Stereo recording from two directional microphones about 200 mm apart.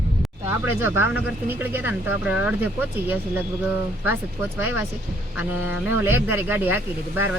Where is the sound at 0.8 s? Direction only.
10° right (ahead or behind).